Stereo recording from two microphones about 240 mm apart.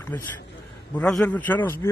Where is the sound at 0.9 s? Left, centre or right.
Centre.